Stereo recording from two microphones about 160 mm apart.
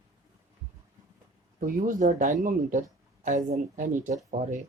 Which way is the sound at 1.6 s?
60° right (ahead or behind).